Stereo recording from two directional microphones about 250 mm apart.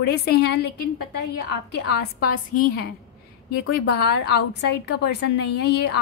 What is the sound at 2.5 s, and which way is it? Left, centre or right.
Speech, left.